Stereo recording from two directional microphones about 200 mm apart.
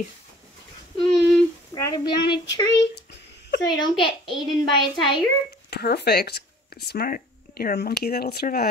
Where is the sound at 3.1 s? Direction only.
60° left (ahead or behind).